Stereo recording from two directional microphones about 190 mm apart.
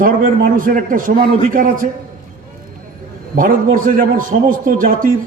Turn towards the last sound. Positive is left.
turn(degrees=-45)  # may be behind; listen again after turning